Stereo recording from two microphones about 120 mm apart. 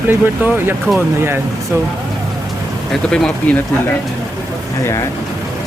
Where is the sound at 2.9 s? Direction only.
5° left (ahead or behind).